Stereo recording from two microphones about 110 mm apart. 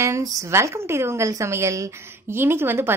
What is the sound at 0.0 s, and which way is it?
A woman's voice, 30° right (ahead or behind).